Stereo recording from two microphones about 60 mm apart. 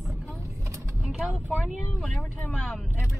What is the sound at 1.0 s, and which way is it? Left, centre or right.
Speech, centre.